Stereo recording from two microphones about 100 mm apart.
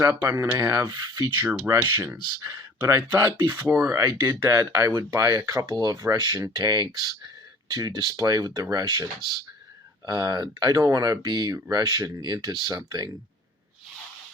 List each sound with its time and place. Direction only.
0.0 s speech: 30° right (ahead or behind)
2.7 s speech: 25° right (ahead or behind); by 13.1 s 45° right (ahead or behind)